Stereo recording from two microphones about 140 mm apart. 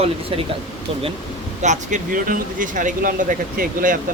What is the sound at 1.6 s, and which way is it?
Speech, 60° right (ahead or behind).